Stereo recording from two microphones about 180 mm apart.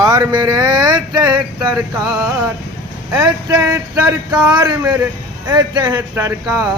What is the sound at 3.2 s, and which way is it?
Speech, 20° right (ahead or behind).